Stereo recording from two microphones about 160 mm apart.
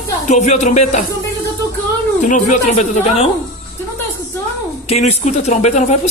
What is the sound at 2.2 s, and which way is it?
Speech, 50° left (ahead or behind).